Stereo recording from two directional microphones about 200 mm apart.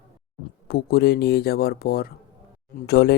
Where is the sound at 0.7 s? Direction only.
50° left (ahead or behind).